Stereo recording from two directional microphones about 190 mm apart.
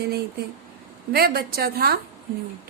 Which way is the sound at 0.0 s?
60° right (ahead or behind).